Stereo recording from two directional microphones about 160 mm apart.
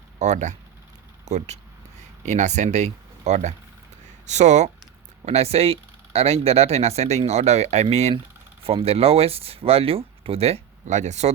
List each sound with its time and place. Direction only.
0.2 s speech: 45° right (ahead or behind)